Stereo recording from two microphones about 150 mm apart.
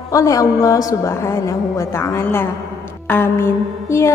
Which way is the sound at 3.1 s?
15° left (ahead or behind).